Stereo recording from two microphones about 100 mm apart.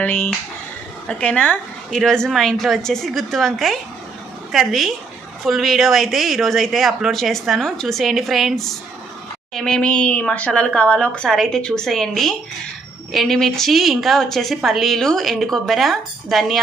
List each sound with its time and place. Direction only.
0.0 s a woman's voice: 15° left (ahead or behind); by 16.6 s centre (ahead or behind)